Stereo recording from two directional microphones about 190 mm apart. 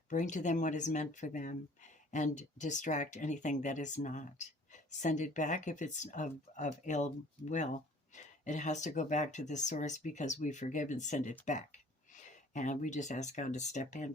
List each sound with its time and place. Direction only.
0.1 s speech: 40° left (ahead or behind)